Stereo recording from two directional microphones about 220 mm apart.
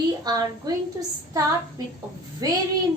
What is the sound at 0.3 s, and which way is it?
A woman's voice, 15° right (ahead or behind).